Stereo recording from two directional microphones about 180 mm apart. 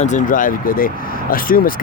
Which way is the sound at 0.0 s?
45° left (ahead or behind).